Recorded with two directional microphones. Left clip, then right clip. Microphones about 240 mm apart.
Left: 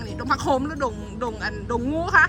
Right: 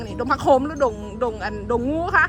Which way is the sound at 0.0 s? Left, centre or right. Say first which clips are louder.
Right 3 dB; centre.